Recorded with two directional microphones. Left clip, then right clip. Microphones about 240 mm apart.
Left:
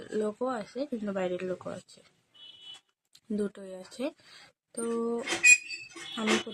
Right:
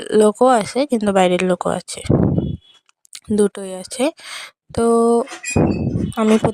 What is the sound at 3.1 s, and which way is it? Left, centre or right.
Speech, right.